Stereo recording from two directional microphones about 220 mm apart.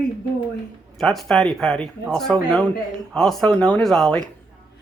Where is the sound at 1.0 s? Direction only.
Centre (ahead or behind).